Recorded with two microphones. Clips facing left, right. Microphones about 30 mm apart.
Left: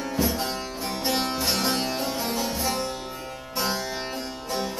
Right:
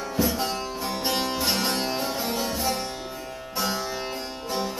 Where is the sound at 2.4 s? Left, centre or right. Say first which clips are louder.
Even; centre.